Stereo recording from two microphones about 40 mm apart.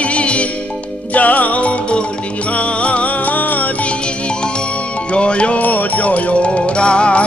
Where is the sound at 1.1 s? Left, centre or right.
Left.